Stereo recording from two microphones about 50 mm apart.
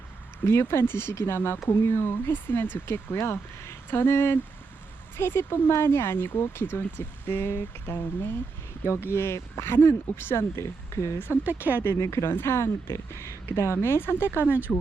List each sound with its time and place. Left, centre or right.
0.4 s speech: left
2.8 s speech: left
10.2 s speech: left
10.5 s speech: left
11.4 s speech: right
11.8 s speech: left
13.8 s speech: left
14.4 s speech: right